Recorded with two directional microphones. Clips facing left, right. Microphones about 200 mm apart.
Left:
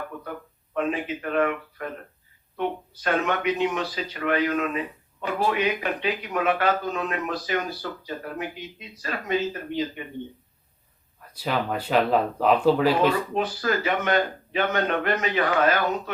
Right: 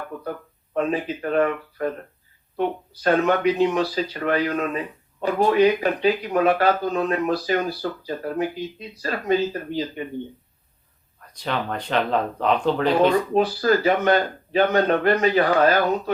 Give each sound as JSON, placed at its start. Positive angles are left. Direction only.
{"t": 0.7, "sound": "speech", "side_deg": -35}
{"t": 11.2, "sound": "speech", "side_deg": 5}
{"t": 13.3, "sound": "speech", "side_deg": -35}